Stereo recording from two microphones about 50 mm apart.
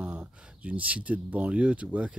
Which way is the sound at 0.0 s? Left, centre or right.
Centre.